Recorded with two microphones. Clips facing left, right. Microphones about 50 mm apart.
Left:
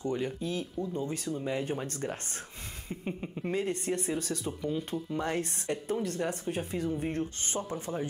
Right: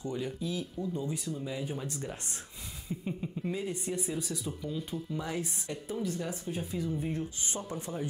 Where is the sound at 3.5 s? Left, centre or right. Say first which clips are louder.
Left 5 dB; left.